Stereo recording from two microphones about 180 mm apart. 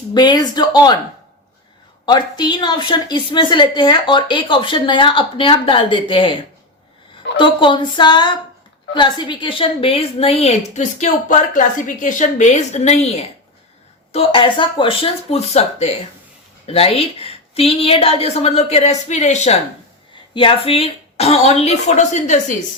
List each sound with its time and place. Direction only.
0.1 s a woman's voice: 25° left (ahead or behind)
2.0 s a woman's voice: 25° left (ahead or behind); by 22.5 s 40° left (ahead or behind)